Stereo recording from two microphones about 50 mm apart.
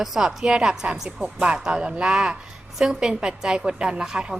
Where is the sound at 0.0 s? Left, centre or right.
Centre.